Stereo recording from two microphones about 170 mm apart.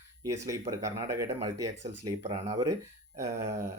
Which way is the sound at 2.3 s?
35° right (ahead or behind).